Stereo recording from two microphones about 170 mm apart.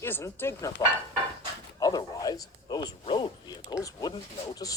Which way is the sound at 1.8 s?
20° left (ahead or behind).